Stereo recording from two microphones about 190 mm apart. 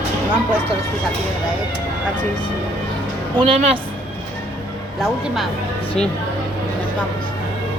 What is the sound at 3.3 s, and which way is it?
Speech, 30° right (ahead or behind).